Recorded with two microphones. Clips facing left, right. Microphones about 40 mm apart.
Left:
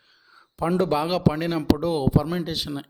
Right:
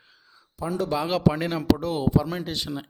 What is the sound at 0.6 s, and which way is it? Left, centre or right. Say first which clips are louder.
Speech: left 5 dB; left.